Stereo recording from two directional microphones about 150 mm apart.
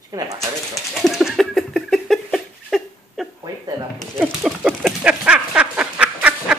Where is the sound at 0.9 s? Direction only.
Centre (ahead or behind).